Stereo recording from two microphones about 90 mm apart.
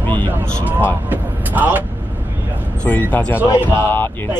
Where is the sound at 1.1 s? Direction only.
20° right (ahead or behind).